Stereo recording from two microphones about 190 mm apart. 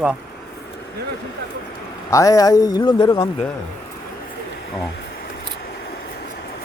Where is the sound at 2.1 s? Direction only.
15° left (ahead or behind).